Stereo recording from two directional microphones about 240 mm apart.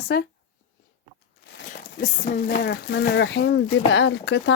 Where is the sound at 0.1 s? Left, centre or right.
Left.